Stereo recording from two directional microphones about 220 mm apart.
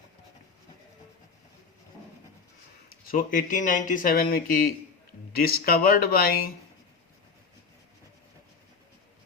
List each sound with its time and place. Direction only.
3.1 s speech: 40° left (ahead or behind)